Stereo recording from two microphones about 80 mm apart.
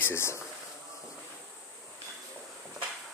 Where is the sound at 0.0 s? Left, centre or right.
Left.